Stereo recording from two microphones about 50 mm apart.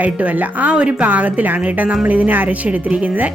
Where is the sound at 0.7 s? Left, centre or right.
Right.